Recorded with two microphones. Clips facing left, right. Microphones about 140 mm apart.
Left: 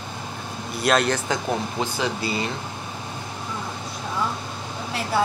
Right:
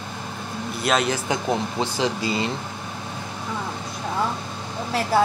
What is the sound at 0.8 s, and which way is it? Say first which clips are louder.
Speech: left 2 dB; centre (ahead or behind).